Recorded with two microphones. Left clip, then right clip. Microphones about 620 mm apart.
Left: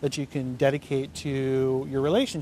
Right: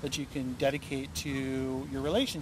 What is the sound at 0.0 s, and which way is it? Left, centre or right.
Speech, left.